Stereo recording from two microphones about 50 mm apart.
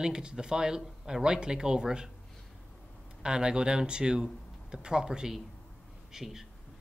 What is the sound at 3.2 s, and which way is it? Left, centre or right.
Speech, centre.